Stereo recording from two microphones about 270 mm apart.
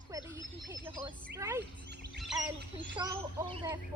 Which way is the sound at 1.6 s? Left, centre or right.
Right.